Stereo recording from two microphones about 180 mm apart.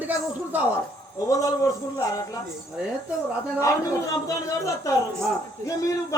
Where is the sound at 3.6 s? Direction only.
20° left (ahead or behind).